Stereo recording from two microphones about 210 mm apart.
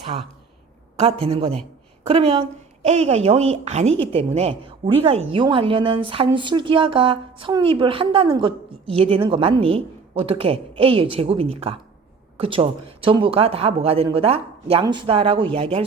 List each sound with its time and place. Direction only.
0.9 s a woman's voice: 25° right (ahead or behind)